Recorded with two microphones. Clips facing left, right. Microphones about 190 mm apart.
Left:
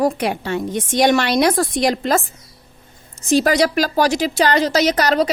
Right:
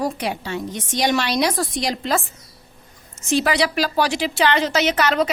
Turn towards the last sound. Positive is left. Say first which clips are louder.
# left 3 dB
turn(degrees=40)  # may be behind; listen again after turning